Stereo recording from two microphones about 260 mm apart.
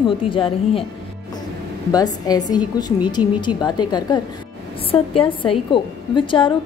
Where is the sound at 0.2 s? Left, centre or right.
Centre.